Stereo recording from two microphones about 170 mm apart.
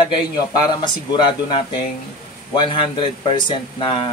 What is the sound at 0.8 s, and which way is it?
Speech, 25° left (ahead or behind).